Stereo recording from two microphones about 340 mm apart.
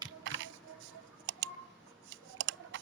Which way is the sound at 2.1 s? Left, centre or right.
Right.